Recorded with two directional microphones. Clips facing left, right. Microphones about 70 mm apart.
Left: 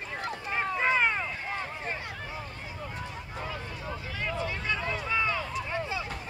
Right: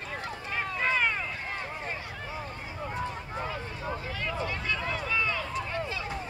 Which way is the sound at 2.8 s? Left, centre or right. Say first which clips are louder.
Right 6 dB; right.